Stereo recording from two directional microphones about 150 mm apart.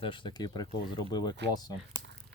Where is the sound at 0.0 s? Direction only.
35° left (ahead or behind).